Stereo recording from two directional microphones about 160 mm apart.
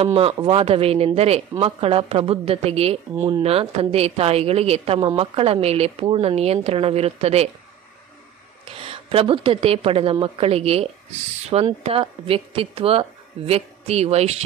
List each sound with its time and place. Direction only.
0.0 s a woman's voice: 40° right (ahead or behind)
8.7 s a woman's voice: 35° right (ahead or behind)